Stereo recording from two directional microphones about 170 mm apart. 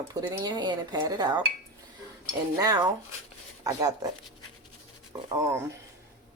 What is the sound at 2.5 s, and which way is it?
Speech, 20° right (ahead or behind).